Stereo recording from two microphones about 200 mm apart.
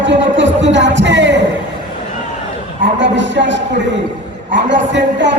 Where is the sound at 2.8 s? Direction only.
65° right (ahead or behind).